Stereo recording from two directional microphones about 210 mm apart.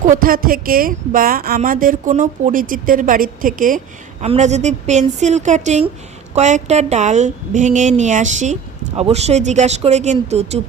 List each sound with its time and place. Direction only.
0.0 s a woman's voice: 40° right (ahead or behind)